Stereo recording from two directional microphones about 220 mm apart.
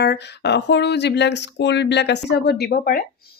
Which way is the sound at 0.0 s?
50° left (ahead or behind).